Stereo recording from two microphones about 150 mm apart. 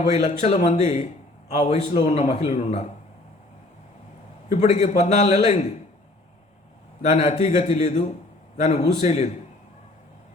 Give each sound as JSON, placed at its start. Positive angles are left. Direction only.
{"t": 0.0, "sound": "a man's voice", "side_deg": 50}
{"t": 4.5, "sound": "a man's voice", "side_deg": 50}
{"t": 7.0, "sound": "a man's voice", "side_deg": 50}